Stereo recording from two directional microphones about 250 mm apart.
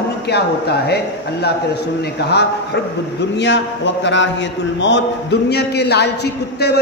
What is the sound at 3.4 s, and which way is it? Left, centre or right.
A man's voice, left.